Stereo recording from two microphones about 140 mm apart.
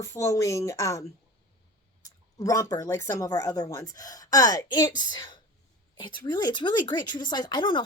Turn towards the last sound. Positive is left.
turn(degrees=35)  # may be behind; listen again after turning